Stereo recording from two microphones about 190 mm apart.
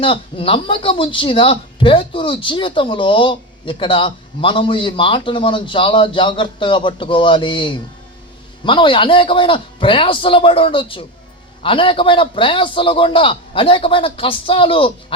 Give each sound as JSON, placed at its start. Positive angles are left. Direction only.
{"t": 0.0, "sound": "speech", "side_deg": 30}